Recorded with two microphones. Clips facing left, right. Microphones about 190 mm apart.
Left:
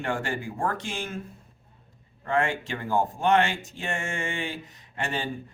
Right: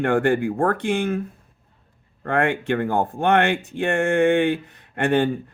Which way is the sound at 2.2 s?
60° right (ahead or behind).